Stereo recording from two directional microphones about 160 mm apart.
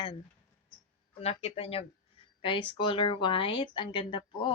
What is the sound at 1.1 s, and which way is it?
Speech, 40° left (ahead or behind).